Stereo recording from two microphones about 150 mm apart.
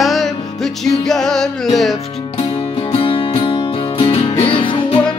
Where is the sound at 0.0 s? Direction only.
Centre (ahead or behind).